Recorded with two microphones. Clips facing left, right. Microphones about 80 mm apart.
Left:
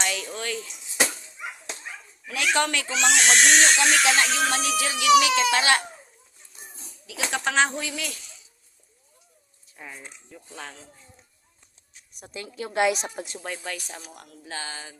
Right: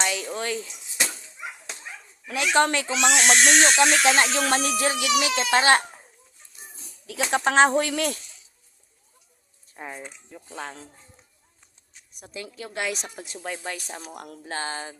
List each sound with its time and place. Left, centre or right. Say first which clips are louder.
0.0 s a sound: right 2 dB; right
2.2 s speech: right 3 dB; right
7.3 s speech: right 5 dB; right
7.7 s speech: right 9 dB; right
9.7 s speech: right 5 dB; right
10.2 s speech: right 3 dB; right
12.2 s a woman's voice: left 2 dB; centre
12.7 s speech: left 8 dB; centre
13.2 s a woman's voice: right 1 dB; centre
13.7 s speech: right 1 dB; right
14.4 s speech: right 4 dB; right